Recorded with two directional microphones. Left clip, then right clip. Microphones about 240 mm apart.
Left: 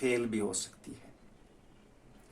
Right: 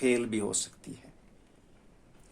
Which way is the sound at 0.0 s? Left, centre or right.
Right.